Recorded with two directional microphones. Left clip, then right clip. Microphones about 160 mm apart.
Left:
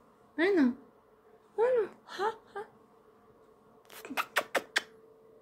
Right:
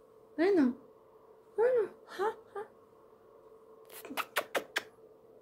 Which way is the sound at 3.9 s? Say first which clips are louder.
Left 4 dB; 20° left (ahead or behind).